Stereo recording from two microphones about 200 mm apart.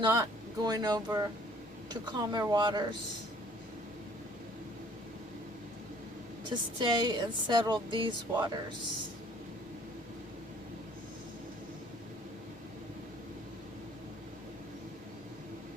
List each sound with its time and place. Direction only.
0.0 s speech: 20° right (ahead or behind)
6.4 s speech: 20° right (ahead or behind)